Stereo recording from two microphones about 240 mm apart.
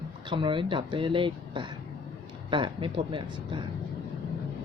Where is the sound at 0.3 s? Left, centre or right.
Centre.